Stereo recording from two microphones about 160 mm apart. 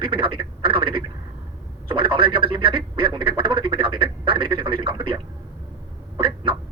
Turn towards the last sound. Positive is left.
turn(degrees=-35)  # may be behind; listen again after turning